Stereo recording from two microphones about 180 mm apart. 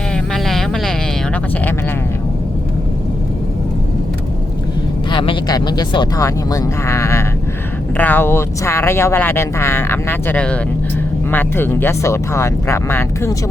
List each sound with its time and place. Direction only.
0.1 s music: centre (ahead or behind)
5.1 s speech: 25° left (ahead or behind)